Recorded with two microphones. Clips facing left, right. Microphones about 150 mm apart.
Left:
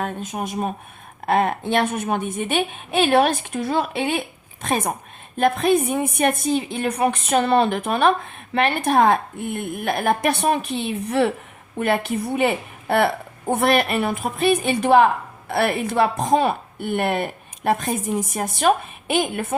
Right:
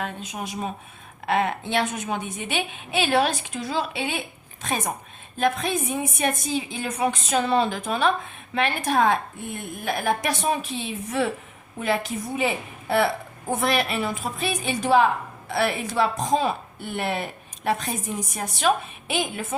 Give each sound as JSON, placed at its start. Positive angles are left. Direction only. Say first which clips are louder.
{"t": 0.0, "sound": "a woman's voice", "louder": "left 5 dB", "side_deg": 50}